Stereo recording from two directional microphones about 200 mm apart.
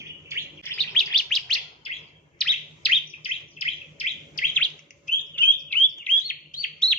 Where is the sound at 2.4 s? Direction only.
5° left (ahead or behind).